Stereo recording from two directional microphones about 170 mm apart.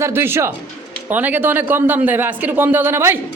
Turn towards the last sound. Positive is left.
turn(degrees=-15)  # may be behind; listen again after turning